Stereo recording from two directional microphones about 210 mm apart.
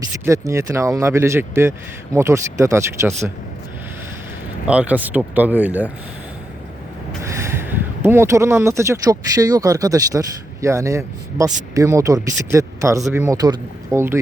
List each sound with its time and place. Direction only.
0.3 s speech: 15° right (ahead or behind)
4.6 s speech: 5° right (ahead or behind)
7.2 s speech: 15° right (ahead or behind)